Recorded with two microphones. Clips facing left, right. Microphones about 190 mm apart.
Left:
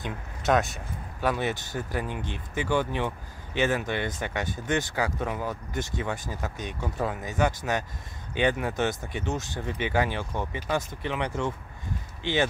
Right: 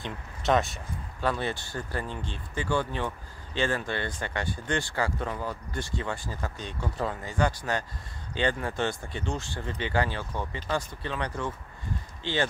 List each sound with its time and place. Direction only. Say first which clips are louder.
0.0 s speech: left 1 dB; centre (ahead or behind)
1.2 s speech: left 2 dB; 15° left (ahead or behind)